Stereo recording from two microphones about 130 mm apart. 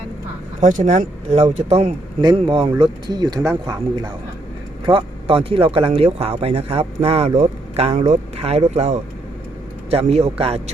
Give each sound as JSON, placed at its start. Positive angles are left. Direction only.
{"t": 0.6, "sound": "speech", "side_deg": -70}
{"t": 2.2, "sound": "speech", "side_deg": -40}
{"t": 4.9, "sound": "speech", "side_deg": -45}